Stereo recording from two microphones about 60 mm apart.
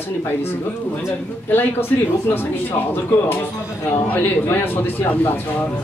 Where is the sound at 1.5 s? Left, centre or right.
Left.